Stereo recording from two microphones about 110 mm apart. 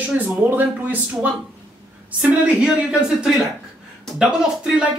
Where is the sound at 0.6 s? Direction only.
15° right (ahead or behind).